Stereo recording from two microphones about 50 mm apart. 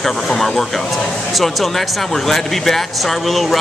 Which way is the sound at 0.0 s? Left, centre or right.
Centre.